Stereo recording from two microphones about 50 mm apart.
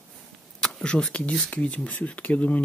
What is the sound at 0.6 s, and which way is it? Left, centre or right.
Speech, centre.